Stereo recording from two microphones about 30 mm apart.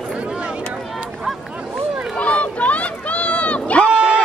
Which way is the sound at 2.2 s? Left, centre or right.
Left.